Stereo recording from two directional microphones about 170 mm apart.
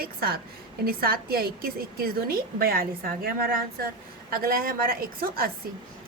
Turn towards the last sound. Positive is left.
turn(degrees=-60)  # may be behind; listen again after turning